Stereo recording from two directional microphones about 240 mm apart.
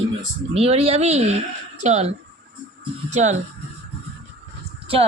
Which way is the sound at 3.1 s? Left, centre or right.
Right.